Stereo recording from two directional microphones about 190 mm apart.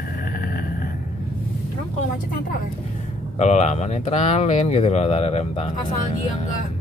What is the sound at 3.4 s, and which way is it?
Speech, 35° left (ahead or behind).